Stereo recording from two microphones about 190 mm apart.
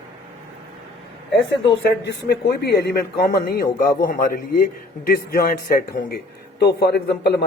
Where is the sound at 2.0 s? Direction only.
65° left (ahead or behind).